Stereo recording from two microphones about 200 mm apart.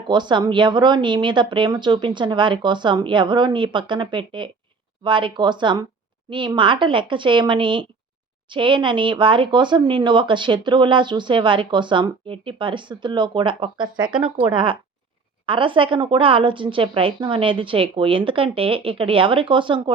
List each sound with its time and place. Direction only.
0.1 s speech: 25° right (ahead or behind)